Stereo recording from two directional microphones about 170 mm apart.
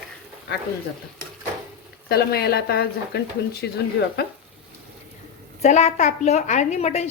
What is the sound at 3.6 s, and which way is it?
Speech, 85° left.